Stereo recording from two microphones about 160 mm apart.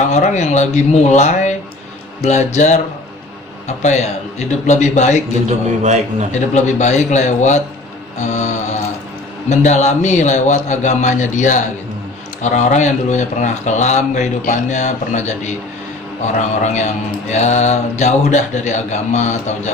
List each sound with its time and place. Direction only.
0.1 s mantra: 50° left (ahead or behind)
5.5 s a man's voice: 45° right (ahead or behind)
6.5 s mantra: 45° left (ahead or behind)